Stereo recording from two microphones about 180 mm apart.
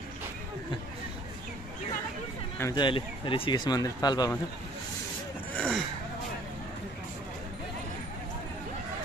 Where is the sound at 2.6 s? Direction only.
25° left (ahead or behind).